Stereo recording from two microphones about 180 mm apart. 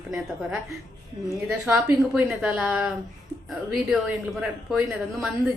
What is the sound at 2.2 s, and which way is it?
A woman's voice, 5° right (ahead or behind).